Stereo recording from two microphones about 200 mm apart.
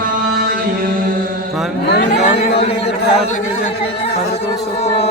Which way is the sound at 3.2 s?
35° left (ahead or behind).